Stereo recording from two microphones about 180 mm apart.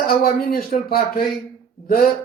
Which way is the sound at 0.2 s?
55° left (ahead or behind).